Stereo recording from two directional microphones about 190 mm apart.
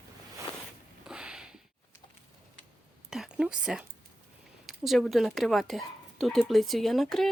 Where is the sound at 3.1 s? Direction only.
5° right (ahead or behind).